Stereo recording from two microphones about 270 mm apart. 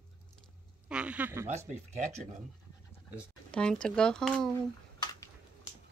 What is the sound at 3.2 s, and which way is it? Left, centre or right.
Speech, centre.